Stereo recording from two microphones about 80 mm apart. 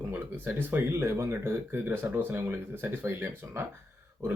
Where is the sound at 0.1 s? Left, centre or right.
Right.